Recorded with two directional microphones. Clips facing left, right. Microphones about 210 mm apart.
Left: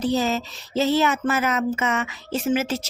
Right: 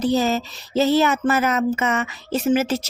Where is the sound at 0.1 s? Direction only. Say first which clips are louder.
Right 3 dB; 40° right (ahead or behind).